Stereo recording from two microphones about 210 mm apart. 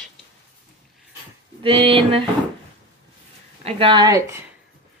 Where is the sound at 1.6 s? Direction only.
25° right (ahead or behind).